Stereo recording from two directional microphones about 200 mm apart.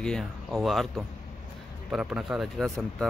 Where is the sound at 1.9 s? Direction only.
5° right (ahead or behind).